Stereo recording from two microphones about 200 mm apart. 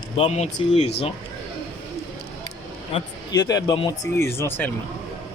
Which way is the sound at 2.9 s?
20° left (ahead or behind).